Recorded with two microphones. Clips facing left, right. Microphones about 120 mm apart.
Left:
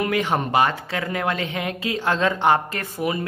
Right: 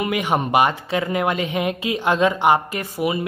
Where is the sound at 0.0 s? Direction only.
15° right (ahead or behind).